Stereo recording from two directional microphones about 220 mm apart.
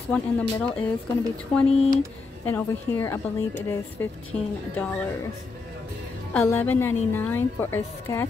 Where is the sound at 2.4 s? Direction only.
10° left (ahead or behind).